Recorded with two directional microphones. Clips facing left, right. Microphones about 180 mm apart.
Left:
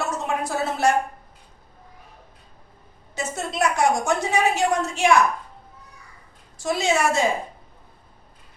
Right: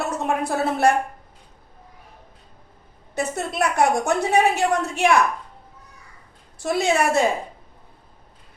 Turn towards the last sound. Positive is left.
turn(degrees=-60)  # may be behind; listen again after turning